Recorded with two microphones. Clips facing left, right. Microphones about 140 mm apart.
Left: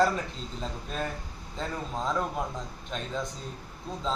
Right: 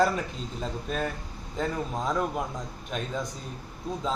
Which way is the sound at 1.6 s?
15° right (ahead or behind).